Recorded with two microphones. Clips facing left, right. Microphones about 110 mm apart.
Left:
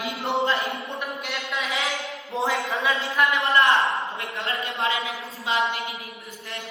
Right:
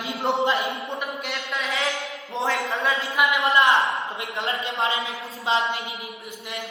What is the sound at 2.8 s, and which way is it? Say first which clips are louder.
Speech: left 1 dB; centre (ahead or behind).